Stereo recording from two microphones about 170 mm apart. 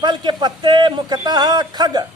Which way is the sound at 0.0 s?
25° right (ahead or behind).